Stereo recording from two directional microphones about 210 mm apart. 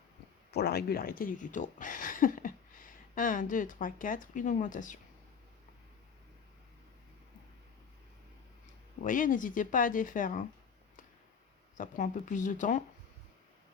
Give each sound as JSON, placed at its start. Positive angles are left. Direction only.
{"t": 0.5, "sound": "speech", "side_deg": 50}
{"t": 9.0, "sound": "speech", "side_deg": 40}
{"t": 11.8, "sound": "speech", "side_deg": 40}